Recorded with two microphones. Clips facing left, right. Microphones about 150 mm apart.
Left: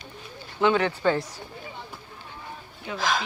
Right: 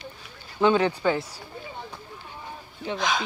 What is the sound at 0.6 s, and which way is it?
Speech, 20° right (ahead or behind).